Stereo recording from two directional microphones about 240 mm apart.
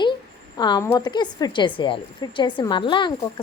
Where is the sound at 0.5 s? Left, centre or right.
Centre.